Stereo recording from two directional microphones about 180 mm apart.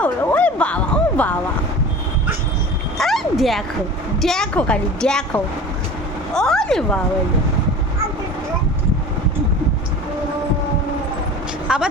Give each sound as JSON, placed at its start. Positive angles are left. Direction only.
{"t": 0.0, "sound": "music", "side_deg": 10}
{"t": 3.0, "sound": "a woman's voice", "side_deg": 0}
{"t": 11.7, "sound": "a woman's voice", "side_deg": -5}